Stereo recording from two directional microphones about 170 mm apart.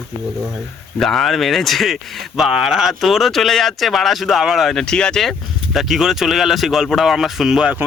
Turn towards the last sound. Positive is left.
turn(degrees=-5)  # may be behind; listen again after turning